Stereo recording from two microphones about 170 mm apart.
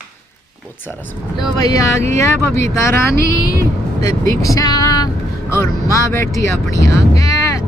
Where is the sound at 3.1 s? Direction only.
65° right (ahead or behind).